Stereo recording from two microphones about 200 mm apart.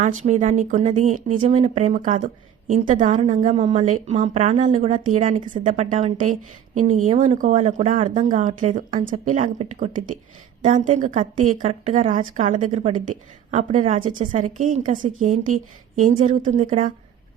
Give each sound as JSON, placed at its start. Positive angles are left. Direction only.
{"t": 0.0, "sound": "speech", "side_deg": -35}